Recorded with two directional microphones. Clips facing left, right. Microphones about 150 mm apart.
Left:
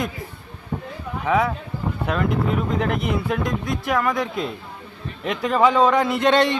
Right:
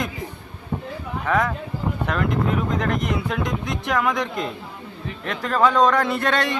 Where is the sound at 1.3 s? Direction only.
10° left (ahead or behind).